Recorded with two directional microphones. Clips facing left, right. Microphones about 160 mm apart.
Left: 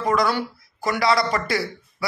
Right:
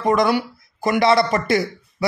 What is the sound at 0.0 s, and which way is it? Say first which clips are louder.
A man's voice: right 4 dB; 20° right (ahead or behind).